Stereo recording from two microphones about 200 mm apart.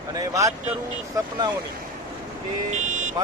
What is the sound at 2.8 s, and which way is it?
Vehicle, 40° right (ahead or behind).